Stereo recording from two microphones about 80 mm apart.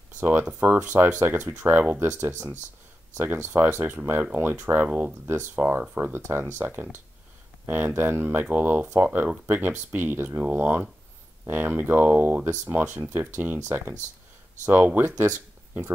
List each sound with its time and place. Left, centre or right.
0.2 s speech: right